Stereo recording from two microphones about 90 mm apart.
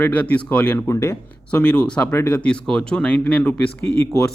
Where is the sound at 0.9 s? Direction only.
35° left (ahead or behind).